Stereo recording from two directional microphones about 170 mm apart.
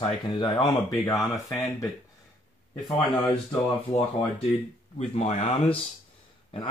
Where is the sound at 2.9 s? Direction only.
25° left (ahead or behind).